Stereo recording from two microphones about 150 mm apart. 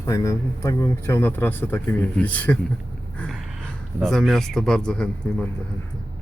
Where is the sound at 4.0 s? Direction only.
Centre (ahead or behind).